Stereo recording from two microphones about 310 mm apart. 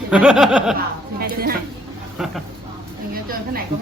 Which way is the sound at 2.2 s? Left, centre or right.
Centre.